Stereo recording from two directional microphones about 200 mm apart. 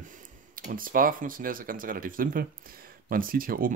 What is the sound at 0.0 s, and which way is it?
Speech, 40° right (ahead or behind).